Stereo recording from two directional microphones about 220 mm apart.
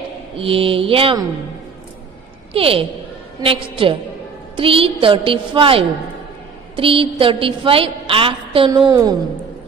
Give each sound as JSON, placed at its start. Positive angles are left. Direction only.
{"t": 0.4, "sound": "a woman's voice", "side_deg": -25}
{"t": 2.5, "sound": "a woman's voice", "side_deg": -25}